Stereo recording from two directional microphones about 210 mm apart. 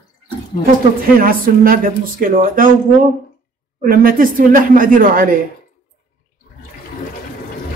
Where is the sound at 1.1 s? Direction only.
40° right (ahead or behind).